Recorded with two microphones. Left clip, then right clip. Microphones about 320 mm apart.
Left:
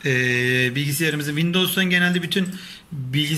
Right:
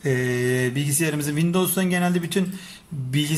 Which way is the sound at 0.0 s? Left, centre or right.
Right.